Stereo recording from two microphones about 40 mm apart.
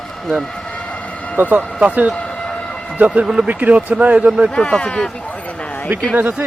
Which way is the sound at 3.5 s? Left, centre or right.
Right.